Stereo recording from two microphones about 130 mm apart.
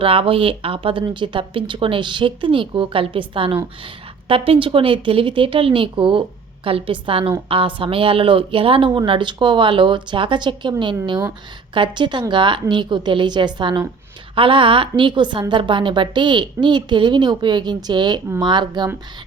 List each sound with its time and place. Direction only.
0.0 s a woman's voice: 45° right (ahead or behind)